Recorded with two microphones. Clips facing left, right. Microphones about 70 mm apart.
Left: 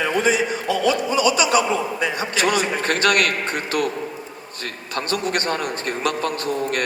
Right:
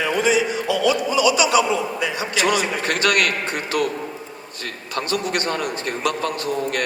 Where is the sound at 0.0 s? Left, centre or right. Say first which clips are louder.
Even; left.